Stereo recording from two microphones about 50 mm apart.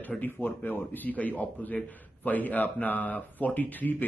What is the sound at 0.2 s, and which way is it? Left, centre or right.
A man's voice, left.